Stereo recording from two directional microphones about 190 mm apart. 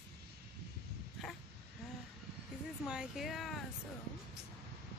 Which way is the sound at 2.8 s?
Centre (ahead or behind).